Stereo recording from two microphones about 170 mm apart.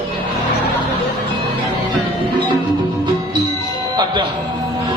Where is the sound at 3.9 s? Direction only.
25° right (ahead or behind).